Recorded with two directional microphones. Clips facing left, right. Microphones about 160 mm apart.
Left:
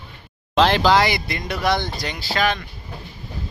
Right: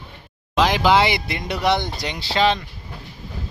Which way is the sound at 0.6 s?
10° right (ahead or behind).